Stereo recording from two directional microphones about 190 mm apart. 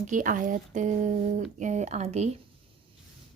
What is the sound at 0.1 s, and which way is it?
Speech, 45° right (ahead or behind).